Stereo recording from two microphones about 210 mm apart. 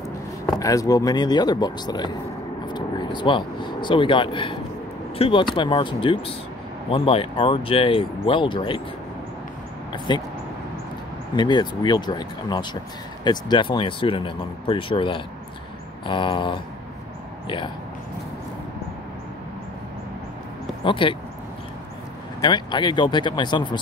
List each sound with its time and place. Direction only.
0.6 s speech: 15° left (ahead or behind)
9.9 s speech: 20° left (ahead or behind)
11.3 s speech: 20° left (ahead or behind)
20.8 s speech: 25° left (ahead or behind)
22.4 s speech: 20° left (ahead or behind)